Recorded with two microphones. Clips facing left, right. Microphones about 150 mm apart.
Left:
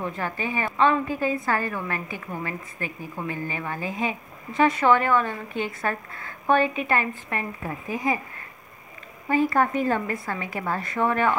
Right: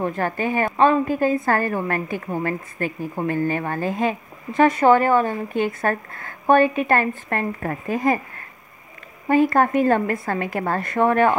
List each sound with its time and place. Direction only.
0.0 s a woman's voice: 50° right (ahead or behind)
9.5 s a woman's voice: 55° right (ahead or behind)